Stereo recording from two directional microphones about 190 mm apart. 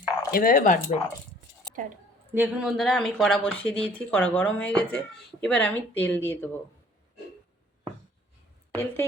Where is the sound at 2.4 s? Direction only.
Centre (ahead or behind).